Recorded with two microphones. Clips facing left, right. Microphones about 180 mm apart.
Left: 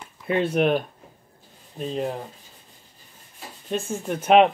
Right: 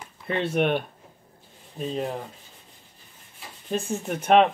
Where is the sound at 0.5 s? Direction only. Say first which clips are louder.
Left 1 dB; centre (ahead or behind).